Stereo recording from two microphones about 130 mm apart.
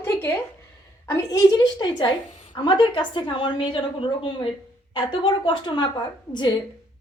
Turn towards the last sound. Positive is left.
turn(degrees=35)  # may be behind; listen again after turning